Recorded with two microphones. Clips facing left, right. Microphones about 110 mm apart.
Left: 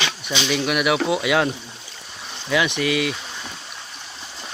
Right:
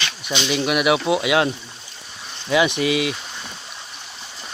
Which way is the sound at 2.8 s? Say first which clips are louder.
Right 1 dB; 20° right (ahead or behind).